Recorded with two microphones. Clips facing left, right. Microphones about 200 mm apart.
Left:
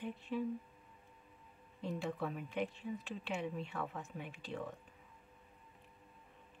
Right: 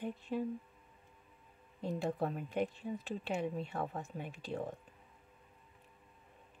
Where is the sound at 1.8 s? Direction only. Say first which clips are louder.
Right 4 dB; 40° right (ahead or behind).